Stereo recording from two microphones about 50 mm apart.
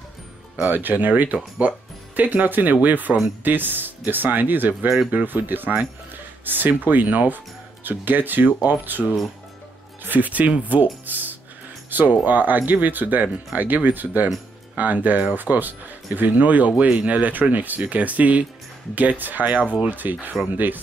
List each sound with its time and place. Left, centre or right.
0.7 s speech: right
10.0 s speech: right